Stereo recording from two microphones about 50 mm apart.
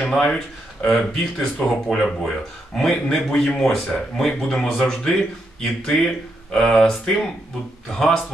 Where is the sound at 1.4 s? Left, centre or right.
Centre.